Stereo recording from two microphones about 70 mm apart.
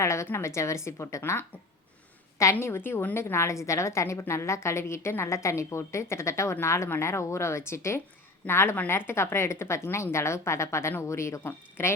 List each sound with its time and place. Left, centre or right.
0.0 s a woman's voice: left
3.2 s a woman's voice: left